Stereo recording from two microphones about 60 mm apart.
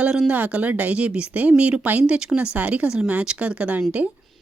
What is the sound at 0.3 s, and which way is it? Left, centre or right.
Speech, right.